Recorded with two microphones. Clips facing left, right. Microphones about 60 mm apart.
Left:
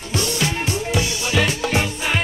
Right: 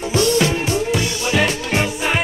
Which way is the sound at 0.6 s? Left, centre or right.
Centre.